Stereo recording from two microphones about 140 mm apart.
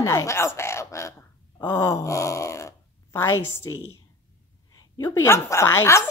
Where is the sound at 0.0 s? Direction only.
20° left (ahead or behind).